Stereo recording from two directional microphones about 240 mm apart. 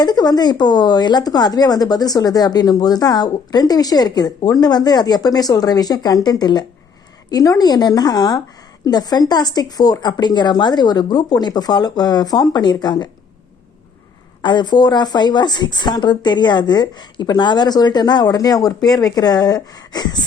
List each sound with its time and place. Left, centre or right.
0.0 s speech: centre
14.4 s speech: centre